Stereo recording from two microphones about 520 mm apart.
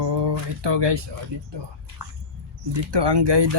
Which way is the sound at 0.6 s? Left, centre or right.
Right.